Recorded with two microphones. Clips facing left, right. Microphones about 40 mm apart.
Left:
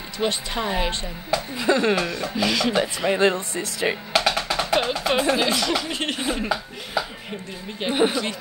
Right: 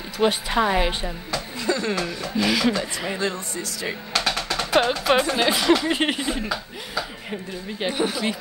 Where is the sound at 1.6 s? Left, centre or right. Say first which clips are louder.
Left 5 dB; left.